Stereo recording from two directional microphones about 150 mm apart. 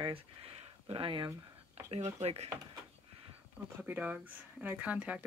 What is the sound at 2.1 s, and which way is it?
Speech, 45° right (ahead or behind).